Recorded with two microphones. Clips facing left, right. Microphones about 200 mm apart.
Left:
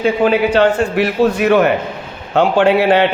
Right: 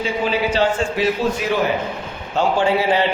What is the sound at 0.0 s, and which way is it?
A man's voice, 60° left (ahead or behind).